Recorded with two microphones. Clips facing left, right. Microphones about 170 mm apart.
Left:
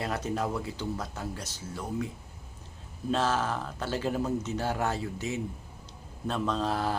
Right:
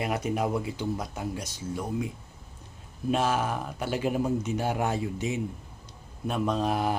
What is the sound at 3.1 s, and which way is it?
Speech, 15° right (ahead or behind).